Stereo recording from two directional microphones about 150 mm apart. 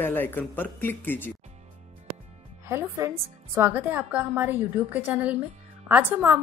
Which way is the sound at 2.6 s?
20° right (ahead or behind).